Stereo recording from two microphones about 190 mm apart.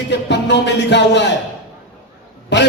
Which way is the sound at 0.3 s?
65° left (ahead or behind).